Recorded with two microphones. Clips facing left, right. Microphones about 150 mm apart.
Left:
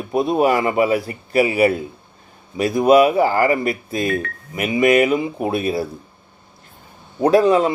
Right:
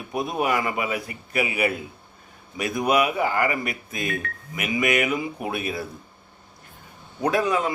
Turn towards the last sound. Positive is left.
turn(degrees=30)  # may be behind; listen again after turning